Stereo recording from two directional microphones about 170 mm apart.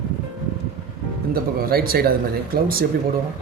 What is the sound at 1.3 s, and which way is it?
Speech, 60° right (ahead or behind).